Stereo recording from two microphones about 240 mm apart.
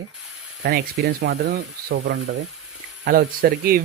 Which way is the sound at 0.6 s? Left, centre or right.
Right.